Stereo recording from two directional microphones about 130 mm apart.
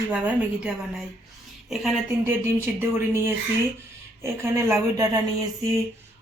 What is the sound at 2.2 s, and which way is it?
Speech, 20° right (ahead or behind).